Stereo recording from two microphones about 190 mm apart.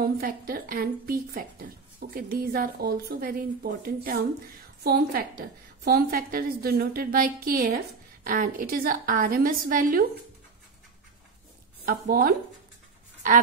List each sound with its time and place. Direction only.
0.2 s speech: 50° right (ahead or behind)
11.8 s speech: 50° right (ahead or behind)